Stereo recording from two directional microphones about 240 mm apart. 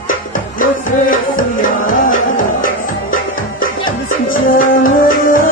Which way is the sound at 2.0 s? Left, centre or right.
Left.